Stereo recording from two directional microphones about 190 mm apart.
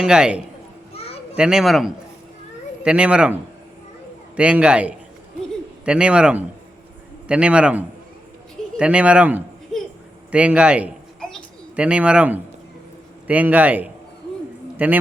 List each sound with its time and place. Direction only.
0.0 s speech: 5° right (ahead or behind)
0.9 s children playing: 30° left (ahead or behind)
1.4 s speech: 5° right (ahead or behind)
4.4 s a man's voice: 5° right (ahead or behind)